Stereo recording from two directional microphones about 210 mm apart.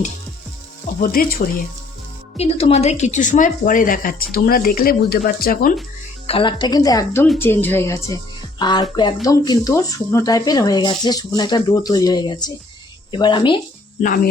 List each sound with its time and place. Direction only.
1.0 s speech: 45° left (ahead or behind)
2.4 s a woman's voice: 30° left (ahead or behind)
6.2 s speech: 25° left (ahead or behind)